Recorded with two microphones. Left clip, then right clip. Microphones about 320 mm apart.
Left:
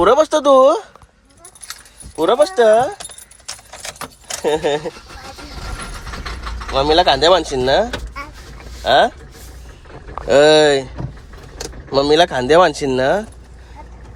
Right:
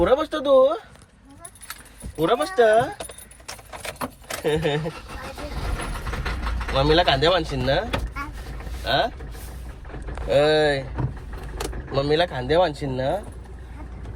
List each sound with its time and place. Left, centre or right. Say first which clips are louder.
0.0 s speech: left 8 dB; left
2.1 s speech: left 6 dB; centre
4.4 s speech: left 6 dB; centre
6.7 s speech: left 6 dB; centre
8.8 s vehicle: left 10 dB; left
10.2 s speech: left 8 dB; left
11.9 s speech: left 9 dB; left